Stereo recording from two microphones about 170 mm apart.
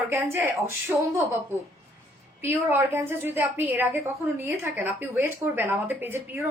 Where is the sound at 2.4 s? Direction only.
15° right (ahead or behind).